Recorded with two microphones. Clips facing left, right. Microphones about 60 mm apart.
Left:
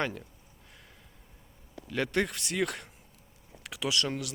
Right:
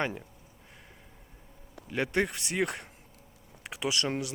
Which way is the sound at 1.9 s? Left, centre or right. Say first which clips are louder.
Right 1 dB; right.